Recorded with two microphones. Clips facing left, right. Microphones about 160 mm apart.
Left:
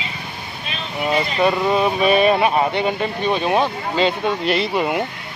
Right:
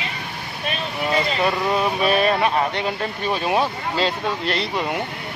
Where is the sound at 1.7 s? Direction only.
5° left (ahead or behind).